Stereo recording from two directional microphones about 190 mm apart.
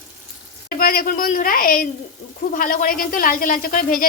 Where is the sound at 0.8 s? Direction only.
50° left (ahead or behind).